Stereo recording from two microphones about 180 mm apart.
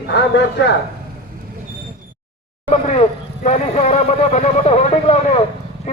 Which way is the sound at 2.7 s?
40° left (ahead or behind).